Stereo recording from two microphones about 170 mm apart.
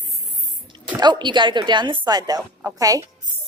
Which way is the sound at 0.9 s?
25° right (ahead or behind).